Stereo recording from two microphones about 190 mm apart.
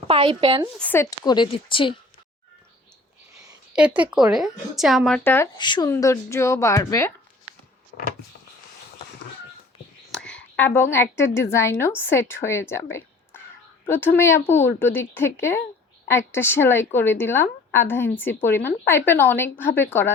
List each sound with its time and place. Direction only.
0.1 s a woman's voice: 30° right (ahead or behind)
0.8 s speech: 10° left (ahead or behind)
1.2 s speech: 20° left (ahead or behind)
3.7 s a woman's voice: 5° right (ahead or behind); by 5.5 s 10° left (ahead or behind)
5.5 s speech: 25° left (ahead or behind)
10.1 s a woman's voice: 5° left (ahead or behind)